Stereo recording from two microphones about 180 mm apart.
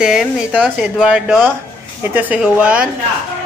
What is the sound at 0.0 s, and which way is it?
Speech, 5° right (ahead or behind).